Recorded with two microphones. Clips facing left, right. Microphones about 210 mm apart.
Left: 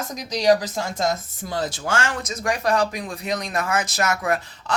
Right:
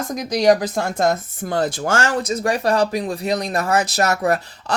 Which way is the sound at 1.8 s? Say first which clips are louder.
Right 5 dB; 40° right (ahead or behind).